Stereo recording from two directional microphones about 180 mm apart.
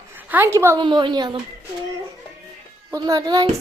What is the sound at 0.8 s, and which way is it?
Speech, 25° right (ahead or behind).